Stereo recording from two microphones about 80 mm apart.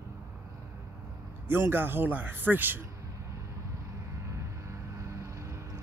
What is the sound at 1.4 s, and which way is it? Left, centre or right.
Speech, right.